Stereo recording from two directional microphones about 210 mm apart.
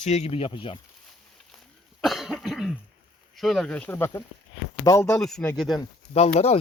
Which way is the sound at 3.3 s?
Centre (ahead or behind).